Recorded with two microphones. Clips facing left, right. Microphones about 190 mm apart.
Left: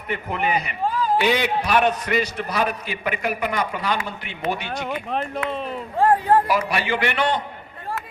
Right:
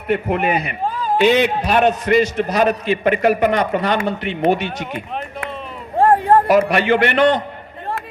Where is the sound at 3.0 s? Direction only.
70° right (ahead or behind).